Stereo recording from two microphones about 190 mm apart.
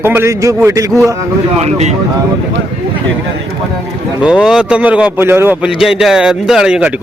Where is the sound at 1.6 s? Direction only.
35° right (ahead or behind).